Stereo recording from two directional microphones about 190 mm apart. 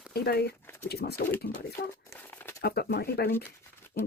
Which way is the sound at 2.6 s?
55° left (ahead or behind).